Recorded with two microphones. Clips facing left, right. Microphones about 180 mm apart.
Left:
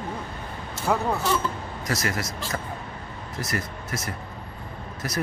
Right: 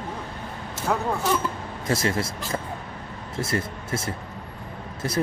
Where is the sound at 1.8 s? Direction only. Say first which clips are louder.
Right 4 dB; 25° right (ahead or behind).